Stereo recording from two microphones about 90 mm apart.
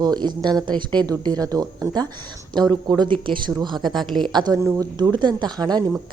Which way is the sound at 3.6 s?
55° right (ahead or behind).